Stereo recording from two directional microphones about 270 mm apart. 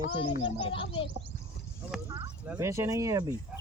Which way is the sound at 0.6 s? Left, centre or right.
Centre.